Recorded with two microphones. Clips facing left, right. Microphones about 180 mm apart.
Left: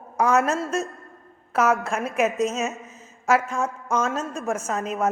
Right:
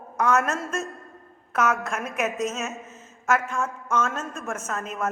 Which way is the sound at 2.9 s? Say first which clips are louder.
Left 3 dB; 35° left (ahead or behind).